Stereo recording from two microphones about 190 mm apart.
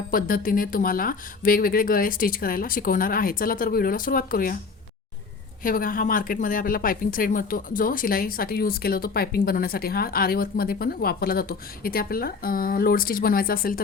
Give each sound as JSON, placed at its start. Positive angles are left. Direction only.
{"t": 0.1, "sound": "a woman's voice", "side_deg": 50}
{"t": 5.6, "sound": "a woman's voice", "side_deg": 50}